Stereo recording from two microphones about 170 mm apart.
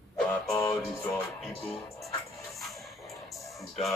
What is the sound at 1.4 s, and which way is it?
Speech, centre (ahead or behind).